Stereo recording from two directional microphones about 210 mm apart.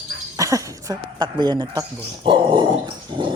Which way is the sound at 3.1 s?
25° right (ahead or behind).